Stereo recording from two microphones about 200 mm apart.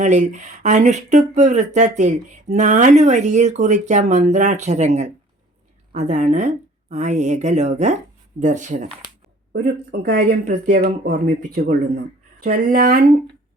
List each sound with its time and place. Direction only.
0.0 s speech: 35° right (ahead or behind)
9.5 s speech: 50° right (ahead or behind)